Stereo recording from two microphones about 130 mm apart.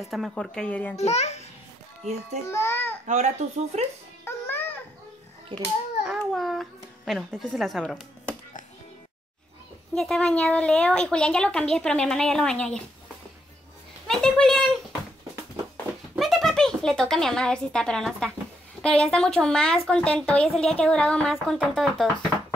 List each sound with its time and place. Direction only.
0.0 s a woman's voice: centre (ahead or behind)
0.9 s a child's voice: 55° left (ahead or behind)
2.4 s a child's voice: 20° left (ahead or behind)
3.1 s speech: 65° right (ahead or behind)
4.2 s music: 15° left (ahead or behind)
5.5 s a child's voice: 35° right (ahead or behind)
6.0 s a sound: centre (ahead or behind)
7.5 s a woman's voice: centre (ahead or behind)
9.9 s a woman's voice: 5° left (ahead or behind)
14.0 s a woman's voice: 5° left (ahead or behind)
16.2 s a woman's voice: centre (ahead or behind)